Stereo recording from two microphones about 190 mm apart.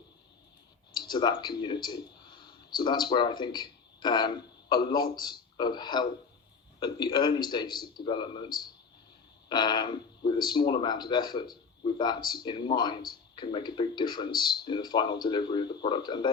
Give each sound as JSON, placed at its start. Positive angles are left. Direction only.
{"t": 0.9, "sound": "speech", "side_deg": 25}
{"t": 9.5, "sound": "speech", "side_deg": 20}